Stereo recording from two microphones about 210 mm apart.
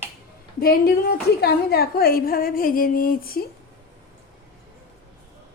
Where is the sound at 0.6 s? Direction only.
45° left (ahead or behind).